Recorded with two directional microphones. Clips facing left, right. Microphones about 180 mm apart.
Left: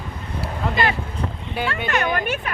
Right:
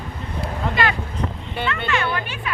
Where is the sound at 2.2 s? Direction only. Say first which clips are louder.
Left 4 dB; 45° left (ahead or behind).